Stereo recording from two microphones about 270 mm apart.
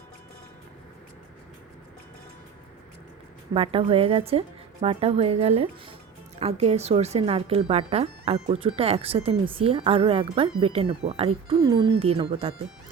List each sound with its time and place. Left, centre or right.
3.5 s speech: centre